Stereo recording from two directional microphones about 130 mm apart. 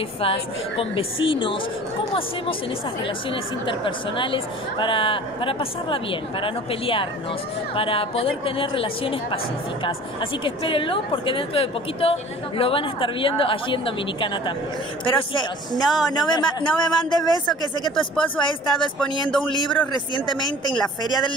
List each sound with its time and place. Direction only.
0.2 s a woman's voice: 45° left (ahead or behind)
3.0 s a woman's voice: 40° left (ahead or behind)
10.4 s a woman's voice: 40° left (ahead or behind)